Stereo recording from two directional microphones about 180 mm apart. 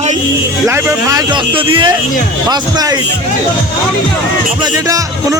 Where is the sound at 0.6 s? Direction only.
15° right (ahead or behind).